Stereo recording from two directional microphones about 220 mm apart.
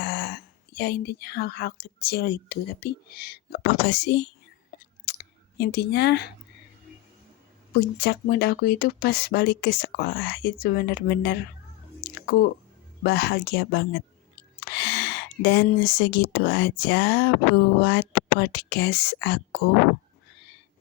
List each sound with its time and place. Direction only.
0.0 s speech: 45° left (ahead or behind)
4.7 s a sound: 45° left (ahead or behind)
7.8 s speech: 45° left (ahead or behind)
13.0 s speech: 45° left (ahead or behind)